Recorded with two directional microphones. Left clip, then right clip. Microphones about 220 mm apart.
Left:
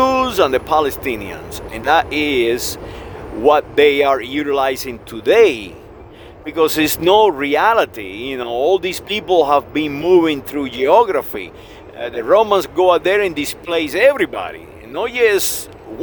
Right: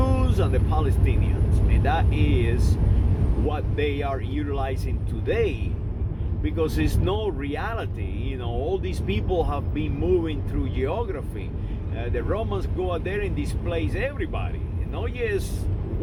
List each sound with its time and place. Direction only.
0.0 s speech: 50° left (ahead or behind)